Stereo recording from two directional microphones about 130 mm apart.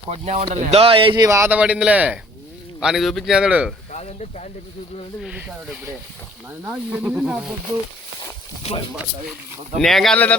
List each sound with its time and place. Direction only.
0.1 s speech: 55° right (ahead or behind); by 1.3 s 40° right (ahead or behind)
1.3 s speech: 20° right (ahead or behind)
1.5 s a man's voice: 10° right (ahead or behind)
3.9 s stir: 60° left (ahead or behind)
5.2 s speech: 10° right (ahead or behind)
6.7 s speech: 10° right (ahead or behind)
8.7 s speech: 50° left (ahead or behind)
9.7 s a man's voice: centre (ahead or behind)